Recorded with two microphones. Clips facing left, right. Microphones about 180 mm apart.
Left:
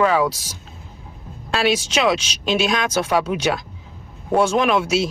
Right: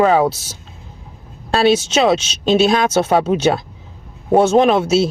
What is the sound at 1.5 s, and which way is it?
Speech, 30° right (ahead or behind).